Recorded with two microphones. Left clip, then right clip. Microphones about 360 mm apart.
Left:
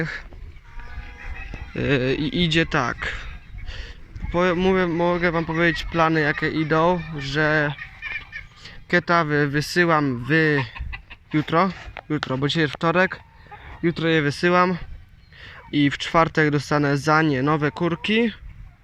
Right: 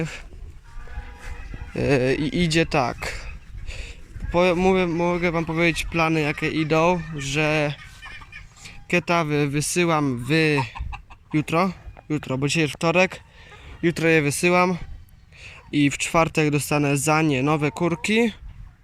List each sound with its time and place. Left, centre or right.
1.7 s speech: centre